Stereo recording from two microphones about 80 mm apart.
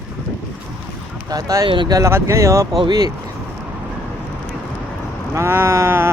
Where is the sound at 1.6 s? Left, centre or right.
Right.